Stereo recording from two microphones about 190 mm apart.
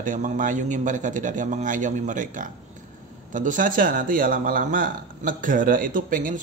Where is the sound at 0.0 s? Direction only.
45° right (ahead or behind).